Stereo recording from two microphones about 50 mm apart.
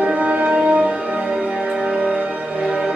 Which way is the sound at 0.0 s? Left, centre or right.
Right.